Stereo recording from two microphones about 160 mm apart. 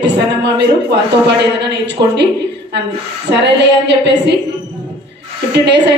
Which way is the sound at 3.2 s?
90° right.